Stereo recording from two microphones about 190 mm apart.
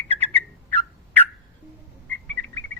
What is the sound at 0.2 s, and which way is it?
Bird, 10° left (ahead or behind).